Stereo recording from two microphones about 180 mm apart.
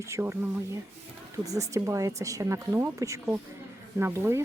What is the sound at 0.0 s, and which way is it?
Speech, 15° right (ahead or behind).